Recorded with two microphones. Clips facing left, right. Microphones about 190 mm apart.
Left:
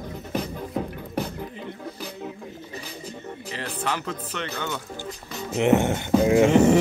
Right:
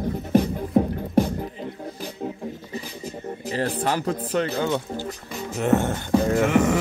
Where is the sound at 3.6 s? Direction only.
40° right (ahead or behind).